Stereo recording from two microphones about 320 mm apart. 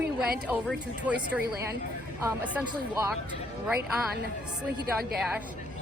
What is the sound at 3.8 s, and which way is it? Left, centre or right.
Speech, right.